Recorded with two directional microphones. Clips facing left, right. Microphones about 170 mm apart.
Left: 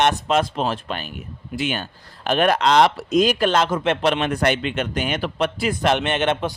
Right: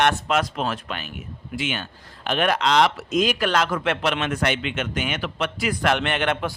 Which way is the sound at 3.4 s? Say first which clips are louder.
Left 3 dB; 25° left (ahead or behind).